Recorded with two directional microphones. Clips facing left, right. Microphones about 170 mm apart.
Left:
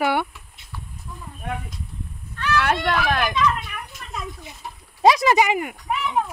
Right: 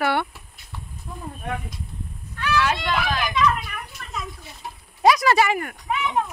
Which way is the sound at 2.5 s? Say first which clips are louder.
Left 2 dB; 60° left (ahead or behind).